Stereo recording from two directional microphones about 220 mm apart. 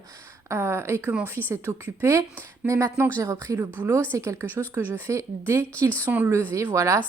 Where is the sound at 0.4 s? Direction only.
10° right (ahead or behind).